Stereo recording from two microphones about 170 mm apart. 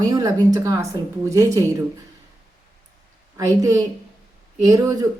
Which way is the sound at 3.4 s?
20° right (ahead or behind).